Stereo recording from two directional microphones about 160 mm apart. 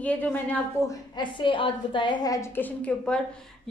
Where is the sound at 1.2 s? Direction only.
30° left (ahead or behind).